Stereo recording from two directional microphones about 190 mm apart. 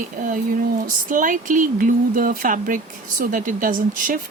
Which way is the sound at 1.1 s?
45° right (ahead or behind).